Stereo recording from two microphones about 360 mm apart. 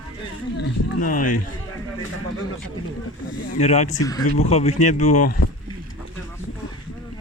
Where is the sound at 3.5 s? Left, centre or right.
Centre.